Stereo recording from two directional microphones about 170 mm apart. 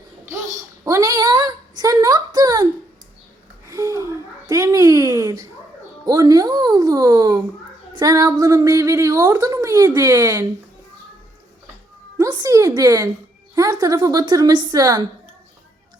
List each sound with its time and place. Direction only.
0.9 s a woman's voice: 20° right (ahead or behind)
3.7 s a woman's voice: 20° right (ahead or behind)
12.1 s a woman's voice: 20° right (ahead or behind)